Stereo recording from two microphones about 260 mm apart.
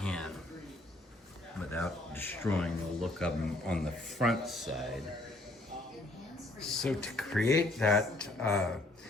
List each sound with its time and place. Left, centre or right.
0.0 s a sound: centre
1.7 s speech: centre
6.6 s speech: centre